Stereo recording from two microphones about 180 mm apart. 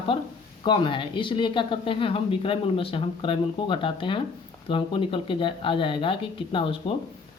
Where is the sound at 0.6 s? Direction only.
25° left (ahead or behind).